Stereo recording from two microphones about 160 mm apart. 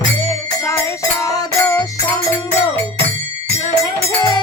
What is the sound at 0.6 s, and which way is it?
Music, 20° left (ahead or behind).